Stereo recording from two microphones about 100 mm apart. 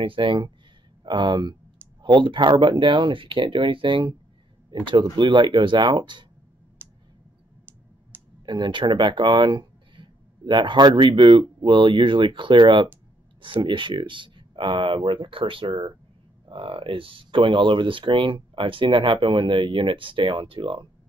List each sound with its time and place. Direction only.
0.0 s speech: 55° right (ahead or behind)
6.8 s a sound: 20° right (ahead or behind)
8.1 s clicking: 20° right (ahead or behind)
8.5 s speech: 50° right (ahead or behind)